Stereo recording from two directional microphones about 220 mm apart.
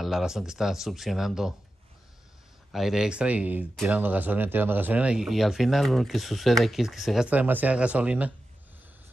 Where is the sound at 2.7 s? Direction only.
Centre (ahead or behind).